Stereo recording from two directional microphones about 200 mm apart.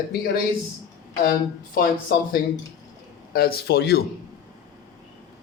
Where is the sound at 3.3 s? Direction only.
50° left (ahead or behind).